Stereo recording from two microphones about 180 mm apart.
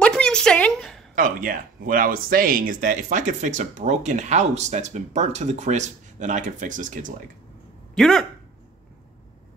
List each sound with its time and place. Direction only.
0.0 s a sound: 5° left (ahead or behind)
1.1 s speech: 50° right (ahead or behind)
7.9 s speech: centre (ahead or behind)